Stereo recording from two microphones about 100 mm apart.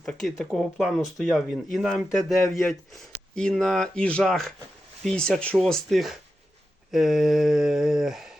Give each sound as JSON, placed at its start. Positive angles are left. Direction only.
{"t": 0.0, "sound": "speech", "side_deg": 5}
{"t": 3.3, "sound": "speech", "side_deg": 5}